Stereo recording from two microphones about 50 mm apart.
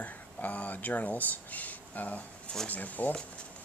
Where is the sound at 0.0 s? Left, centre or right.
Left.